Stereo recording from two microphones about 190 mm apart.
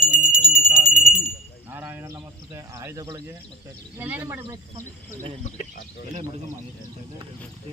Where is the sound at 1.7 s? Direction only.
10° right (ahead or behind).